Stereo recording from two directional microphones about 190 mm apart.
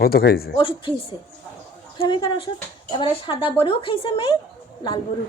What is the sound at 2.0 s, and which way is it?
Speech, 25° left (ahead or behind).